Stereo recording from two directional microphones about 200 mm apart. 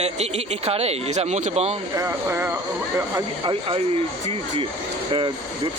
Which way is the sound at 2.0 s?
15° right (ahead or behind).